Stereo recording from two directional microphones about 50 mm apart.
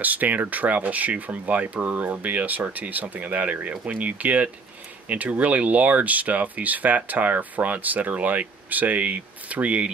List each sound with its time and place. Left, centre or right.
0.0 s speech: right